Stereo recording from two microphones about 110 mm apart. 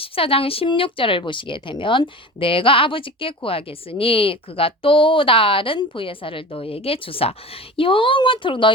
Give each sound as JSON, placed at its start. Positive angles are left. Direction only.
{"t": 0.0, "sound": "speech", "side_deg": 60}